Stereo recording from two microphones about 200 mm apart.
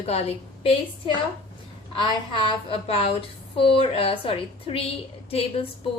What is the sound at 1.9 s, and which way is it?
A woman's voice, 25° left (ahead or behind).